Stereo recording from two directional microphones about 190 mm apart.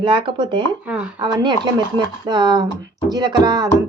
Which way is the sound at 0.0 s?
25° right (ahead or behind).